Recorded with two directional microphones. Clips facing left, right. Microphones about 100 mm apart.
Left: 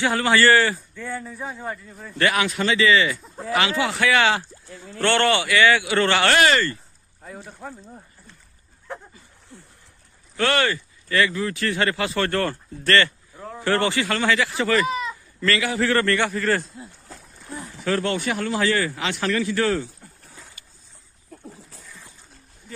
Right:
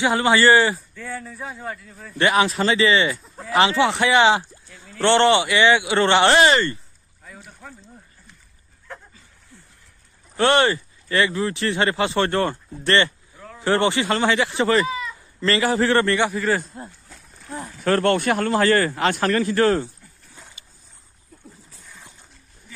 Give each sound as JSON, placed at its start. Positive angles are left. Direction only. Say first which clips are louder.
{"t": 0.0, "sound": "speech", "louder": "right 2 dB", "side_deg": -20}
{"t": 0.9, "sound": "a man's voice", "louder": "left 1 dB", "side_deg": 0}
{"t": 2.1, "sound": "speech", "louder": "right 3 dB", "side_deg": -25}
{"t": 4.6, "sound": "speech", "louder": "left 2 dB", "side_deg": 25}
{"t": 5.0, "sound": "speech", "louder": "right 4 dB", "side_deg": -20}
{"t": 7.2, "sound": "speech", "louder": "left 5 dB", "side_deg": 30}
{"t": 8.9, "sound": "a sound", "louder": "left 4 dB", "side_deg": 20}
{"t": 10.3, "sound": "speech", "louder": "right 4 dB", "side_deg": -25}
{"t": 13.4, "sound": "a sound", "louder": "left 5 dB", "side_deg": 25}
{"t": 13.7, "sound": "speech", "louder": "right 2 dB", "side_deg": -20}
{"t": 16.3, "sound": "a man's voice", "louder": "right 1 dB", "side_deg": -10}
{"t": 16.6, "sound": "speech", "louder": "right 2 dB", "side_deg": -50}
{"t": 20.6, "sound": "boat", "louder": "even", "side_deg": -20}